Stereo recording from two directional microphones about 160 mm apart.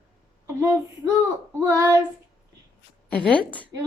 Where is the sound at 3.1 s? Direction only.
10° left (ahead or behind).